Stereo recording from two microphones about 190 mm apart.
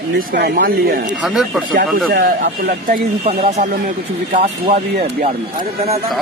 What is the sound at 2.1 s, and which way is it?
Speech, 55° right (ahead or behind).